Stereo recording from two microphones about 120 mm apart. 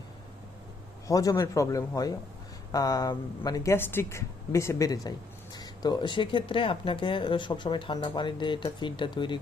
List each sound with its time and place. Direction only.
1.0 s a woman's voice: 30° left (ahead or behind)